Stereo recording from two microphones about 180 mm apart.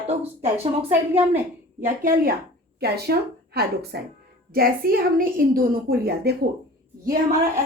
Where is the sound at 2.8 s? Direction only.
60° right (ahead or behind).